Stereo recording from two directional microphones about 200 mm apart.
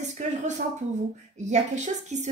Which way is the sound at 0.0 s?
35° right (ahead or behind).